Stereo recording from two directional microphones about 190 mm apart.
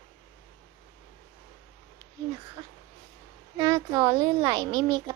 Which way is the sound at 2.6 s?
20° right (ahead or behind).